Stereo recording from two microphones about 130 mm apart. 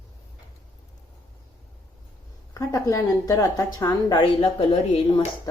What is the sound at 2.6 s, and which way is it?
A woman's voice, 25° left (ahead or behind).